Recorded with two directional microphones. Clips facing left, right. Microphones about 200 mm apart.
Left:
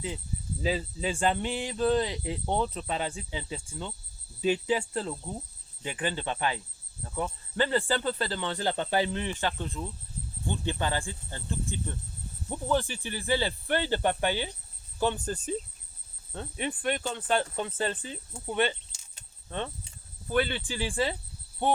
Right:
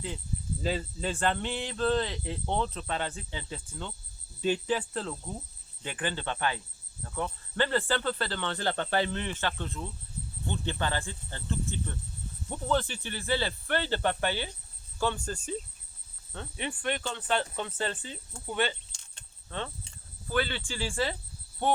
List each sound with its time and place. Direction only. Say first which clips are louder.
0.6 s speech: left 2 dB; 5° left (ahead or behind)
14.9 s cricket: left 2 dB; 20° left (ahead or behind)
16.8 s speech: left 1 dB; 10° left (ahead or behind)
18.3 s keys jangling: left 3 dB; 10° left (ahead or behind)
19.5 s cricket: left 2 dB; 15° left (ahead or behind)
20.2 s speech: left 3 dB; 15° left (ahead or behind)